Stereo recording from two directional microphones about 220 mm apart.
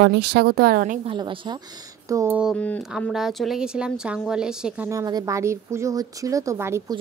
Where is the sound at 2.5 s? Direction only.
5° left (ahead or behind); by 7.0 s 15° right (ahead or behind).